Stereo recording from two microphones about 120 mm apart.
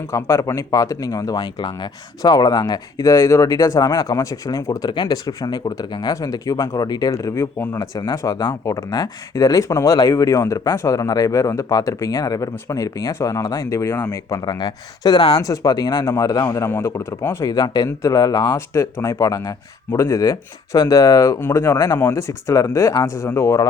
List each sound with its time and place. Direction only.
0.1 s speech: 25° left (ahead or behind)
18.7 s speech: 25° left (ahead or behind)